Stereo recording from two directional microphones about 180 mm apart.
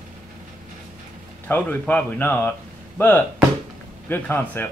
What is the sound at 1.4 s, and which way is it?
Speech, 10° left (ahead or behind).